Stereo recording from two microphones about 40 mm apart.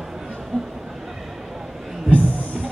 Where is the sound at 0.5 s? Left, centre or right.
Centre.